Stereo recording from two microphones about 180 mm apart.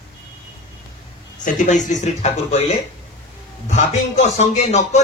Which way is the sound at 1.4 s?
45° left (ahead or behind).